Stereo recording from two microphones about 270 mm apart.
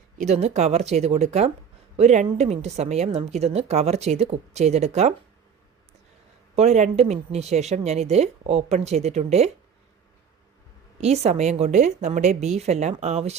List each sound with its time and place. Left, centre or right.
0.2 s a woman's voice: right
6.6 s a woman's voice: right
11.0 s a woman's voice: right